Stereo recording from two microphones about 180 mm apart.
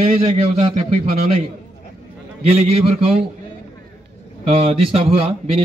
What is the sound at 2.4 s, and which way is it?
Speech, 35° right (ahead or behind).